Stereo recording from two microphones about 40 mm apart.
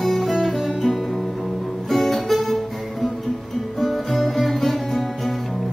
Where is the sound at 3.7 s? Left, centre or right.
Centre.